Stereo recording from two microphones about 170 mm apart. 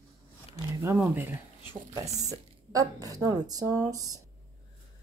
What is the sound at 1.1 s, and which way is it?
Speech, 10° right (ahead or behind).